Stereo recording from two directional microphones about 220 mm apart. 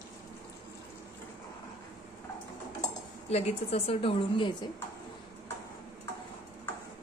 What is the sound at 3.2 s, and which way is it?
A woman's voice, 30° left (ahead or behind).